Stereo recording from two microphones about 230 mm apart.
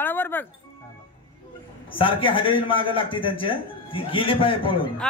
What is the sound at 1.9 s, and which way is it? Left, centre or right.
A man's voice, left.